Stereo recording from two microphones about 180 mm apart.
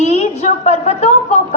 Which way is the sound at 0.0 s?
40° left (ahead or behind).